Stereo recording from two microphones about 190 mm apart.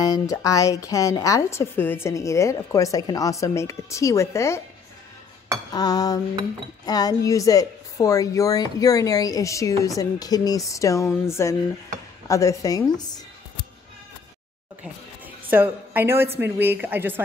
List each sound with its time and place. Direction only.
0.0 s a woman's voice: 20° left (ahead or behind)
5.7 s dishes: 20° left (ahead or behind)
6.9 s a woman's voice: 20° left (ahead or behind)
14.8 s a woman's voice: 10° right (ahead or behind)